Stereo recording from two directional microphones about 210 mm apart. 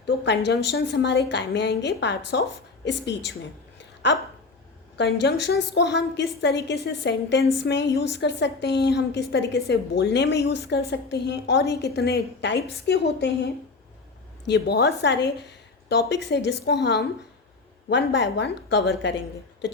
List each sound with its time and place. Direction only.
0.0 s a woman's voice: 55° left (ahead or behind)